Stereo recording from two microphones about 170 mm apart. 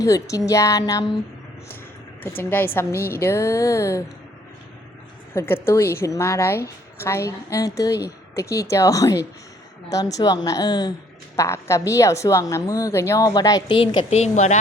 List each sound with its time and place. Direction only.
0.0 s a woman's voice: 20° left (ahead or behind)
2.2 s a woman's voice: 10° left (ahead or behind)
5.3 s a woman's voice: 15° left (ahead or behind); by 14.6 s 40° left (ahead or behind)